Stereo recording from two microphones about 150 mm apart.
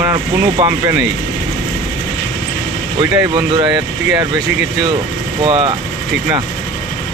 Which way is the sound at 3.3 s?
30° right (ahead or behind).